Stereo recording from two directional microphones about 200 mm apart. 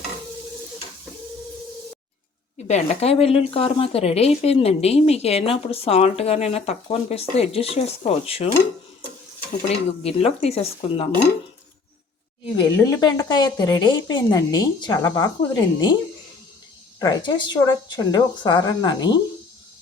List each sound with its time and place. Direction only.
2.6 s speech: 35° left (ahead or behind)
9.6 s a woman's voice: 30° left (ahead or behind)
12.5 s a woman's voice: 20° left (ahead or behind)
17.0 s a woman's voice: 20° left (ahead or behind)